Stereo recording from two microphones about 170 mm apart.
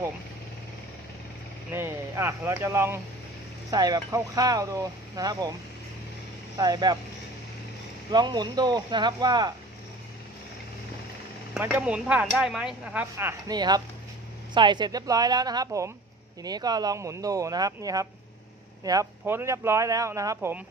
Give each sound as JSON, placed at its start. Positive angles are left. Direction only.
{"t": 1.7, "sound": "speech", "side_deg": -15}
{"t": 6.6, "sound": "speech", "side_deg": -25}
{"t": 8.1, "sound": "speech", "side_deg": -25}
{"t": 11.6, "sound": "speech", "side_deg": -10}